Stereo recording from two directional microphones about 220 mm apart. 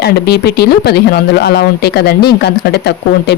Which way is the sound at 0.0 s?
50° left (ahead or behind).